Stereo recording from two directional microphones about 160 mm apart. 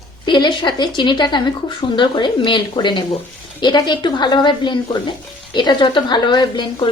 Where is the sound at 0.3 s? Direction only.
30° left (ahead or behind).